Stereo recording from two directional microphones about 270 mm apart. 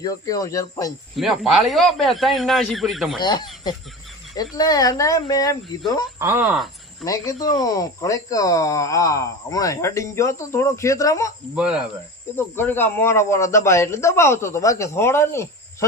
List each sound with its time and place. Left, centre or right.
0.0 s speech: centre
1.1 s a man's voice: centre
3.2 s speech: centre
6.1 s speech: centre
7.3 s speech: centre
11.5 s a man's voice: centre
12.5 s speech: centre